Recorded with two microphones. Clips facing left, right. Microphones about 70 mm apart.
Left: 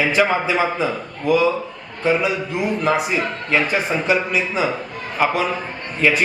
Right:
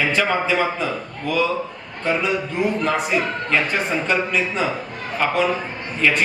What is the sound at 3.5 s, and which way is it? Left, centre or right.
A man's voice, centre.